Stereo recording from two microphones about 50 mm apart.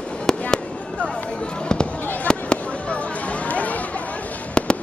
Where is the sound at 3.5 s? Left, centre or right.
Left.